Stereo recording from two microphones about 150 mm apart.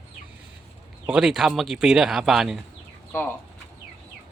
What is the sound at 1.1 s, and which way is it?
Speech, 5° right (ahead or behind).